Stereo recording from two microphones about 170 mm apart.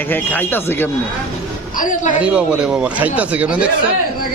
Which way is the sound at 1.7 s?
50° left (ahead or behind).